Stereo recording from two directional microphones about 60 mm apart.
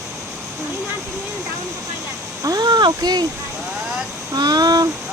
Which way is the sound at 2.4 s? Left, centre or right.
Right.